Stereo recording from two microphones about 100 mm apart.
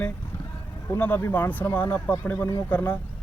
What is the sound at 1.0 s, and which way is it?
Speech, 25° left (ahead or behind).